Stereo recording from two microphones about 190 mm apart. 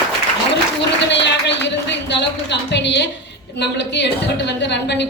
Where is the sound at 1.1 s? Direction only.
65° left (ahead or behind).